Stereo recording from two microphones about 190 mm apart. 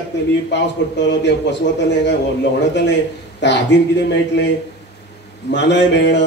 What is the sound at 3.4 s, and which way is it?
A man's voice, 65° left (ahead or behind).